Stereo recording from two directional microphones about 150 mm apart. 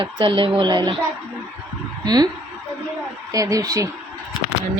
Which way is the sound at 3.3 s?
20° right (ahead or behind).